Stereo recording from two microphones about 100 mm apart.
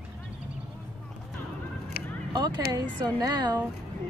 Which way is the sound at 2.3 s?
40° right (ahead or behind).